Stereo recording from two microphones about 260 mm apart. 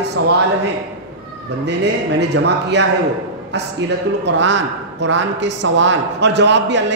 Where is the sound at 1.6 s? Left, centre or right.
Right.